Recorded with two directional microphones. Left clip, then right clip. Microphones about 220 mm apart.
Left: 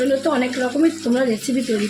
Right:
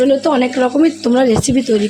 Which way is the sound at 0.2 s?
35° right (ahead or behind).